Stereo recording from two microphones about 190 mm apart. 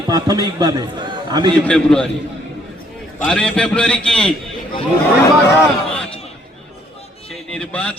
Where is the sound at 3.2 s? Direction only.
5° left (ahead or behind).